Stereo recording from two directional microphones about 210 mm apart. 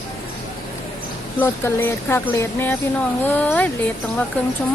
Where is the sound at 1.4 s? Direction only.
10° left (ahead or behind).